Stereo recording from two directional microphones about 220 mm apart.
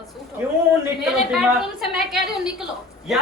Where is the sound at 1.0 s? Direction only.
Centre (ahead or behind).